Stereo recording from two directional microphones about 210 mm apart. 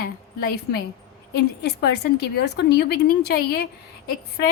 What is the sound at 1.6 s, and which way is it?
A woman's voice, 50° left (ahead or behind).